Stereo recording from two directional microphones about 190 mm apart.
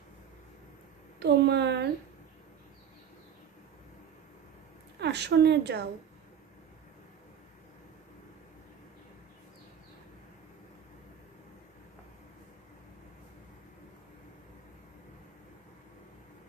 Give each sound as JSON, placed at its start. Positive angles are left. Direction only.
{"t": 1.2, "sound": "a woman's voice", "side_deg": -60}
{"t": 5.0, "sound": "a woman's voice", "side_deg": -60}